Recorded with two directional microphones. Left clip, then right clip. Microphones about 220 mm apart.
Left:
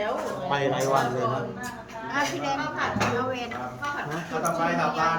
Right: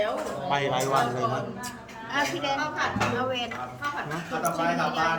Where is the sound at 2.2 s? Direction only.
20° right (ahead or behind).